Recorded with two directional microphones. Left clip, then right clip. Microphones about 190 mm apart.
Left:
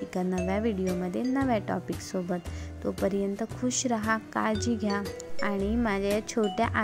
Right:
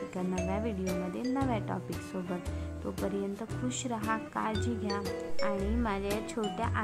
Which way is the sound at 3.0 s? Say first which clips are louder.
Left 6 dB; 20° left (ahead or behind).